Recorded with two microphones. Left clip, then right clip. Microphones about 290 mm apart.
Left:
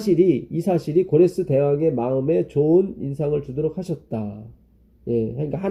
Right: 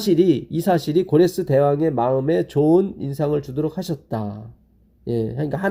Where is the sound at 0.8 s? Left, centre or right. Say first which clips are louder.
Left 3 dB; right.